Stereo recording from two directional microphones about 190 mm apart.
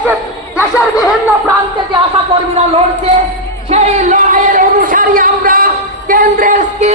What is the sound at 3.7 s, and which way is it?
Music, 35° right (ahead or behind).